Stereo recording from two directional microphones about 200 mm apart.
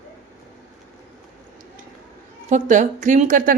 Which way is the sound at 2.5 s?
40° right (ahead or behind).